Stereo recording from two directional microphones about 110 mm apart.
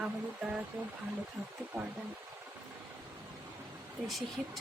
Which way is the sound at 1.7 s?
20° right (ahead or behind).